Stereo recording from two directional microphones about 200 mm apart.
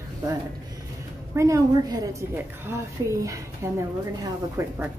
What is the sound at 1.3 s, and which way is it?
A woman's voice, 15° right (ahead or behind).